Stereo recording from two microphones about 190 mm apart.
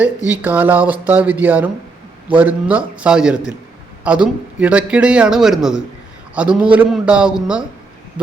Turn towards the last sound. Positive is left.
turn(degrees=-5)  # may be behind; listen again after turning